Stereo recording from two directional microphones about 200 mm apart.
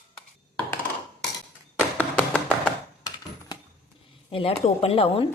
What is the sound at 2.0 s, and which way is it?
Music, 10° left (ahead or behind).